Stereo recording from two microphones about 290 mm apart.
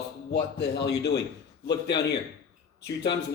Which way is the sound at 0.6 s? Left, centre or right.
Left.